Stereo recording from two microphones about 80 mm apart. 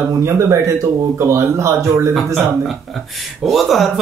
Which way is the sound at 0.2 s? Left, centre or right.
Right.